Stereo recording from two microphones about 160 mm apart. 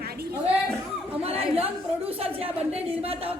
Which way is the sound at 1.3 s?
40° right (ahead or behind).